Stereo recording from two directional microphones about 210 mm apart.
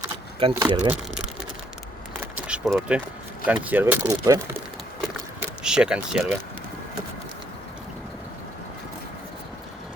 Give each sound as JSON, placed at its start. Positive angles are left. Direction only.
{"t": 0.3, "sound": "speech", "side_deg": -25}
{"t": 2.2, "sound": "a sound", "side_deg": -5}
{"t": 3.4, "sound": "speech", "side_deg": -5}